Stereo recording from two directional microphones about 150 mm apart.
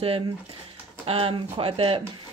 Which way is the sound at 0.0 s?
40° right (ahead or behind).